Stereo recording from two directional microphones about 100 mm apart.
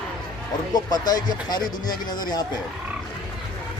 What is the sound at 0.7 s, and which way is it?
Speech, 40° left (ahead or behind).